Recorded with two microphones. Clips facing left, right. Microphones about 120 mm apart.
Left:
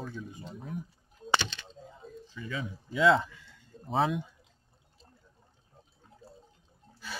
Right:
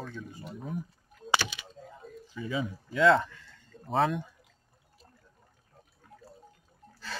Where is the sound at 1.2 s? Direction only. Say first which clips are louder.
Even; 10° right (ahead or behind).